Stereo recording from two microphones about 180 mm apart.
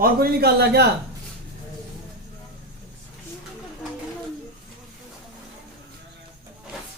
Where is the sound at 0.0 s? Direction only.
60° right (ahead or behind).